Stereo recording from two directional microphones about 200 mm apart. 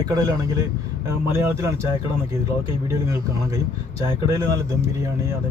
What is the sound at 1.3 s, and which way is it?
Speech, 15° right (ahead or behind).